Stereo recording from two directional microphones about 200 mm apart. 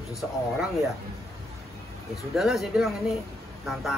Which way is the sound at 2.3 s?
Centre (ahead or behind).